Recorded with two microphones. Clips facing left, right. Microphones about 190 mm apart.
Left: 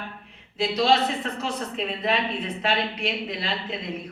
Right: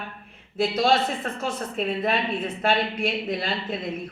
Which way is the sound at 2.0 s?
50° right (ahead or behind).